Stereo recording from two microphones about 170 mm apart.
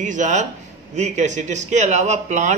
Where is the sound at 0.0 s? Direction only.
45° right (ahead or behind).